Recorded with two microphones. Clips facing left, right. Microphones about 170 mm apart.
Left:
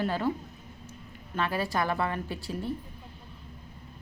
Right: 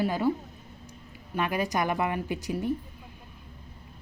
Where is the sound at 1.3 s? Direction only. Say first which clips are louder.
Right 2 dB; 15° right (ahead or behind).